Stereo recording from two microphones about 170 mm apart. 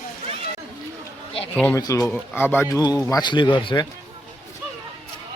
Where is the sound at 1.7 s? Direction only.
20° left (ahead or behind).